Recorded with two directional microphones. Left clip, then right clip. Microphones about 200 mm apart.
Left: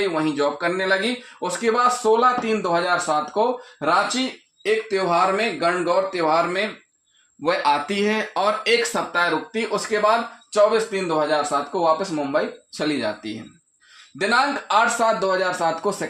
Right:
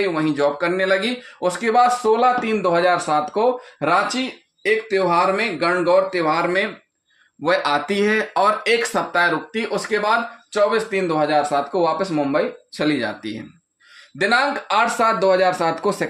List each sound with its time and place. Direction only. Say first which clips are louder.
0.3 s speech: right 3 dB; 40° right (ahead or behind)
7.4 s speech: right 1 dB; 25° right (ahead or behind); by 16.0 s 40° right (ahead or behind)